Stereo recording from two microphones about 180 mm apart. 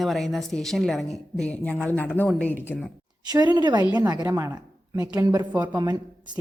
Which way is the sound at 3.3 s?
20° right (ahead or behind).